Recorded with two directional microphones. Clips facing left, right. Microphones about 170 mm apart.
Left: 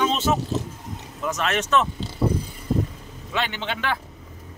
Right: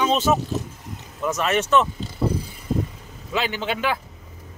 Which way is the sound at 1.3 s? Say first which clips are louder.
Right 3 dB; 5° right (ahead or behind).